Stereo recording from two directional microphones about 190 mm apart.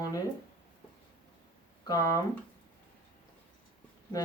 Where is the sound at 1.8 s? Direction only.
20° left (ahead or behind).